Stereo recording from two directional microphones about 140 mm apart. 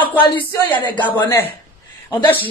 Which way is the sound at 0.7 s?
15° left (ahead or behind).